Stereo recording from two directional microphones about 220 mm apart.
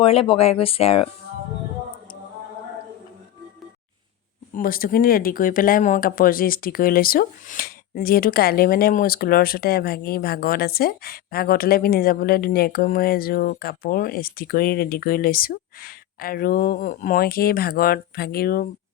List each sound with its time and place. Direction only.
0.0 s speech: 25° left (ahead or behind)
4.5 s speech: 40° left (ahead or behind)